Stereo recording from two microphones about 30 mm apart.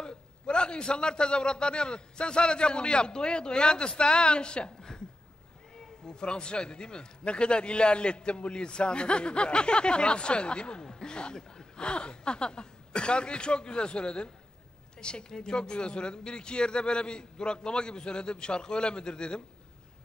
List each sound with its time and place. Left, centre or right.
0.0 s a man's voice: left
6.0 s a man's voice: left
10.8 s a sound: left
11.3 s gasp: left
11.8 s a man's voice: left